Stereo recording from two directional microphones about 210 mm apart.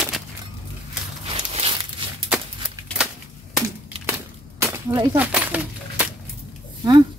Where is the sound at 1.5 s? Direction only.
25° right (ahead or behind).